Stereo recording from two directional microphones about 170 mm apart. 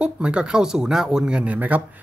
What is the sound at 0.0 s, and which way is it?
Speech, 5° right (ahead or behind).